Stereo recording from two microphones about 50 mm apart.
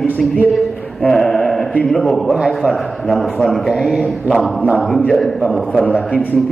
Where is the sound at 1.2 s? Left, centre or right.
Left.